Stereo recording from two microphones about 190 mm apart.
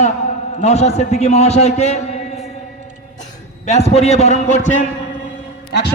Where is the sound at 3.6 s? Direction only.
35° left (ahead or behind).